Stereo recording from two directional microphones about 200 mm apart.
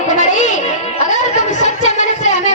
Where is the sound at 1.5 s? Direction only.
35° left (ahead or behind).